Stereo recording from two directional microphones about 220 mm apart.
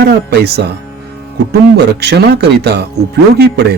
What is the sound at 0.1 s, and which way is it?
Speech, 50° right (ahead or behind).